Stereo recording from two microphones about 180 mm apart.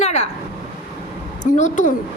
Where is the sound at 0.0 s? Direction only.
40° left (ahead or behind).